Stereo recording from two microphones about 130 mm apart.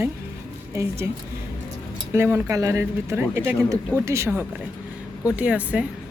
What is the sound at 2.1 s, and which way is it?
Speech, 15° right (ahead or behind).